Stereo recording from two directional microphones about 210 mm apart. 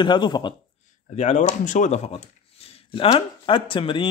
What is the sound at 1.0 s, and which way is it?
Speech, 35° left (ahead or behind).